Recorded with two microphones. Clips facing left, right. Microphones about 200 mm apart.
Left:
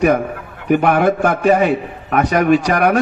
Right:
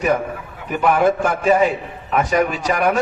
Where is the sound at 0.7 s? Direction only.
60° left (ahead or behind).